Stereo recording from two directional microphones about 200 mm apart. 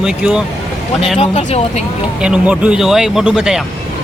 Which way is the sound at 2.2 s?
5° right (ahead or behind).